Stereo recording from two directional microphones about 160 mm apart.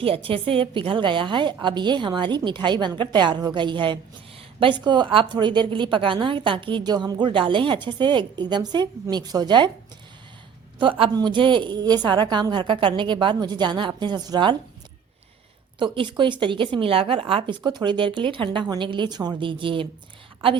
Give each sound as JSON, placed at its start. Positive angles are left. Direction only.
{"t": 0.0, "sound": "a woman's voice", "side_deg": -35}
{"t": 10.8, "sound": "a woman's voice", "side_deg": -30}
{"t": 15.8, "sound": "speech", "side_deg": -30}